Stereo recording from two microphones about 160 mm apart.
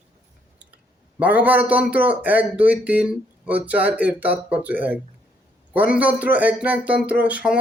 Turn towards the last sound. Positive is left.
turn(degrees=-10)  # may be behind; listen again after turning